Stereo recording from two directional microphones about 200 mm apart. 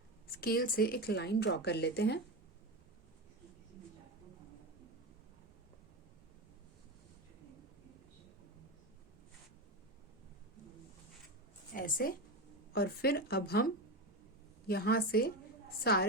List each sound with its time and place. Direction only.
0.3 s a woman's voice: 50° left (ahead or behind)
11.7 s a sound: 45° left (ahead or behind)
12.7 s a woman's voice: 50° left (ahead or behind)